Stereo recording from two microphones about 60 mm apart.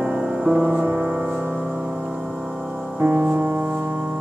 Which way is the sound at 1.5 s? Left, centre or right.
Centre.